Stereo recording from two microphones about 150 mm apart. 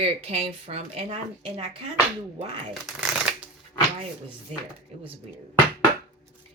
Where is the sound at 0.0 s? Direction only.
40° right (ahead or behind).